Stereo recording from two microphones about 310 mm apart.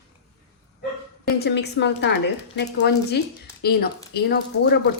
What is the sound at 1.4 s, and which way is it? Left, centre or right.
A woman's voice, left.